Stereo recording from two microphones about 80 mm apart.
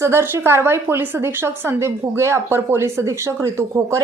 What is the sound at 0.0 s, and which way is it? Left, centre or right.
A woman's voice, right.